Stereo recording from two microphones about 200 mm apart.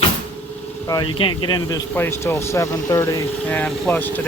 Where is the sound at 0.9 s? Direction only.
25° left (ahead or behind).